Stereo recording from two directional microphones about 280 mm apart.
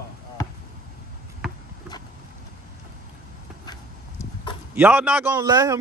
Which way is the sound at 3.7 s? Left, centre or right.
Centre.